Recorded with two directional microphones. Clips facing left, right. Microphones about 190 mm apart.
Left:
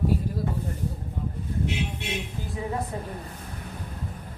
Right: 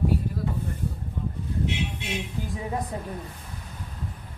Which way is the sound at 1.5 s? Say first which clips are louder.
Even; 50° left (ahead or behind).